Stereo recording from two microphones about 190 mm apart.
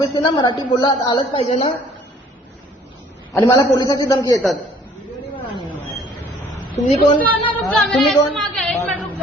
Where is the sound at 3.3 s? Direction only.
15° left (ahead or behind).